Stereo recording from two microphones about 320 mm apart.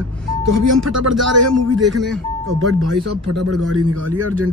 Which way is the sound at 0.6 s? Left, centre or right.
Right.